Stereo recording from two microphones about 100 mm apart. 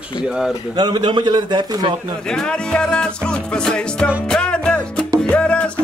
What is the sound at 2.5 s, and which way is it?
Music, 10° left (ahead or behind).